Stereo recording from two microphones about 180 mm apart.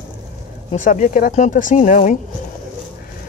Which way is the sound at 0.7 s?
45° left (ahead or behind).